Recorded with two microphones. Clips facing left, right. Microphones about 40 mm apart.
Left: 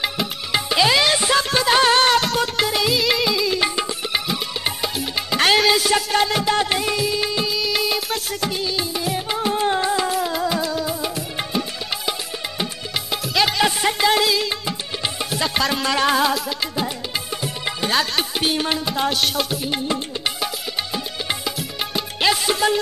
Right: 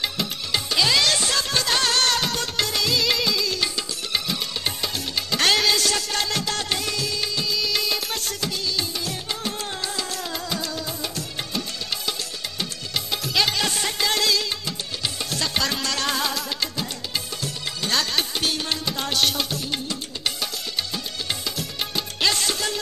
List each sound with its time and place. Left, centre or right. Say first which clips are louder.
0.0 s music: left 3 dB; centre
4.3 s music: left 3 dB; centre
13.1 s music: left 3 dB; centre
19.0 s music: even; centre
20.9 s music: left 4 dB; centre